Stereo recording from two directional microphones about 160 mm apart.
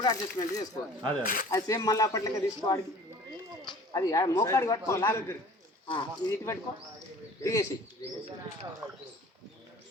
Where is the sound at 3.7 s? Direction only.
20° left (ahead or behind).